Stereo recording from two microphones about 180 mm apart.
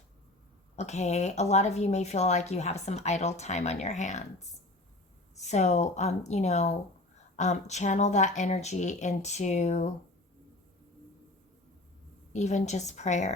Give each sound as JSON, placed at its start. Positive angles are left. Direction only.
{"t": 0.8, "sound": "speech", "side_deg": 40}
{"t": 12.3, "sound": "speech", "side_deg": 40}